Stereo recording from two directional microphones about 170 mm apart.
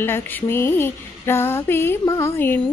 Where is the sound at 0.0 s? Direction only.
15° left (ahead or behind).